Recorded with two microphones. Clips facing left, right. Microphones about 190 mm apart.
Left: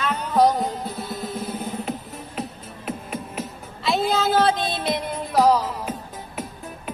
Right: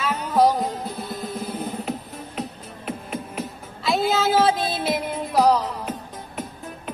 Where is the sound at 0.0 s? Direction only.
5° right (ahead or behind).